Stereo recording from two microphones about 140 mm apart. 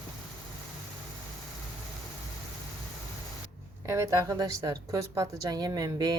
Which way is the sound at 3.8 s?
20° right (ahead or behind).